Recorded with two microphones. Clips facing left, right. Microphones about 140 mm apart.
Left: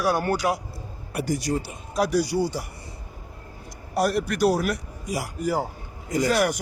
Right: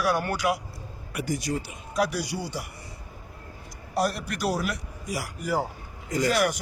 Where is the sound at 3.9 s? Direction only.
55° left (ahead or behind).